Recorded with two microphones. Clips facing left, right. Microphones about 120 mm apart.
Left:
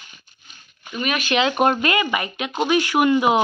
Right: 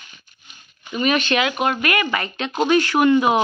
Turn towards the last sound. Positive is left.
turn(degrees=15)  # may be behind; listen again after turning